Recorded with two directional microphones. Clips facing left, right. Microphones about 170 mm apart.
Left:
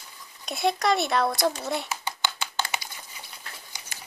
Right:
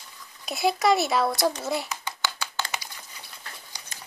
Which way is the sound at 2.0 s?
20° left (ahead or behind).